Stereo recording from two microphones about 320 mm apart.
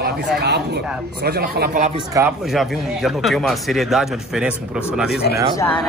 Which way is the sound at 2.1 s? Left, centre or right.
Centre.